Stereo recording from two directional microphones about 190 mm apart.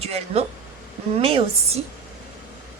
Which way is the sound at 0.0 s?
35° right (ahead or behind).